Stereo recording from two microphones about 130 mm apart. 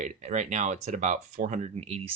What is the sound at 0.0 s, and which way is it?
Speech, 65° right (ahead or behind).